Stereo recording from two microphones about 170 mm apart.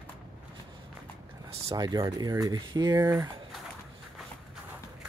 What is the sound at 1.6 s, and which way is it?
Speech, 25° right (ahead or behind).